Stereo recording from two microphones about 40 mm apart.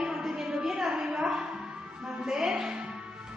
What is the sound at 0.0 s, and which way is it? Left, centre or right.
Music, centre.